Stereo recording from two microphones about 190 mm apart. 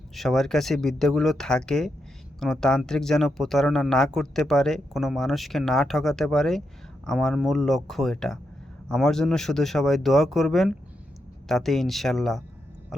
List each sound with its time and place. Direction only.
0.1 s speech: centre (ahead or behind)